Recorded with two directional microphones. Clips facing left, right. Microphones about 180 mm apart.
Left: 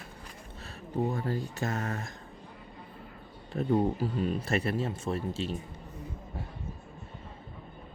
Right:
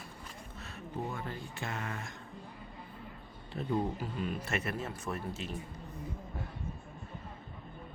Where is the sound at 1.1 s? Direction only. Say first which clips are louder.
Left 8 dB; 40° left (ahead or behind).